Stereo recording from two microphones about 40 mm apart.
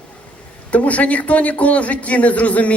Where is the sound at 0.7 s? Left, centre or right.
Left.